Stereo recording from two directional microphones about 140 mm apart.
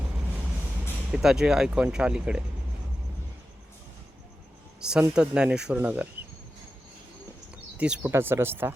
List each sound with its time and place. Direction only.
1.1 s speech: 5° right (ahead or behind)
4.8 s a man's voice: 5° right (ahead or behind)
7.5 s speech: 10° right (ahead or behind)